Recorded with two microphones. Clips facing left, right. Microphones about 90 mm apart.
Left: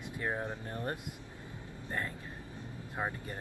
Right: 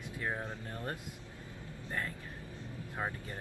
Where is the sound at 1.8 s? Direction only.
20° left (ahead or behind).